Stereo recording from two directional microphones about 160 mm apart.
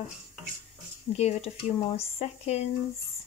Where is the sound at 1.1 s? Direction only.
40° left (ahead or behind).